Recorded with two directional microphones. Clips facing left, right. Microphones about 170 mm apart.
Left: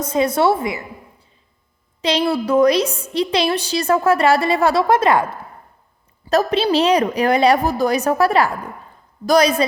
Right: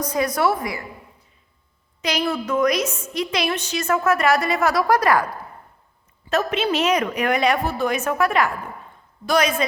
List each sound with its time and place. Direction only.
0.0 s a woman's voice: 25° left (ahead or behind)
2.0 s a woman's voice: 30° left (ahead or behind)
6.2 s a woman's voice: 35° left (ahead or behind)